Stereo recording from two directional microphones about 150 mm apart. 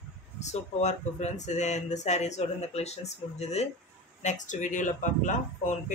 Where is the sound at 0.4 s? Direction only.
50° left (ahead or behind).